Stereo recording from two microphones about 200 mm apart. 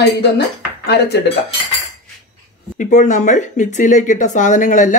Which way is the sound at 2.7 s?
40° left (ahead or behind).